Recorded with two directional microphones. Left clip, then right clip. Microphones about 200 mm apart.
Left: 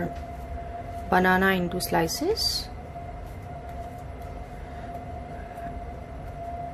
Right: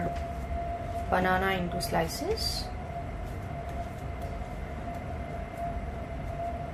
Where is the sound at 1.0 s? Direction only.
55° left (ahead or behind).